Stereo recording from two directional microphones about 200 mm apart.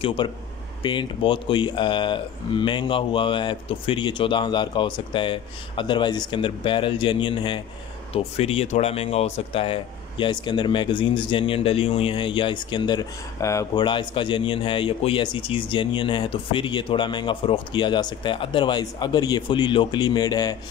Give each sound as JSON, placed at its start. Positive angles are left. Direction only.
{"t": 0.0, "sound": "speech", "side_deg": 25}